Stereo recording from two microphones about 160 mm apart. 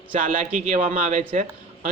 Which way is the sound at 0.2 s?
60° right (ahead or behind).